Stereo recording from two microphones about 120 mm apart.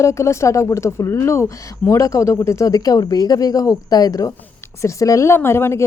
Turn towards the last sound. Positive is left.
turn(degrees=20)  # may be behind; listen again after turning